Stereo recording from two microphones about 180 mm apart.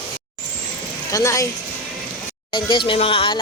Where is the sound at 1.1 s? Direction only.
15° left (ahead or behind).